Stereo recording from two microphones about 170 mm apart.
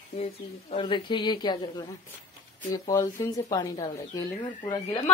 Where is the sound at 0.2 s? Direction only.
40° left (ahead or behind).